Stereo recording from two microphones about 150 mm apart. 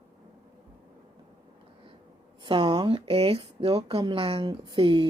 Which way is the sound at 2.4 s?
30° right (ahead or behind).